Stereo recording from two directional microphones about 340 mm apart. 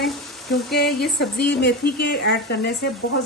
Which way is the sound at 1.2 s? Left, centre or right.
Left.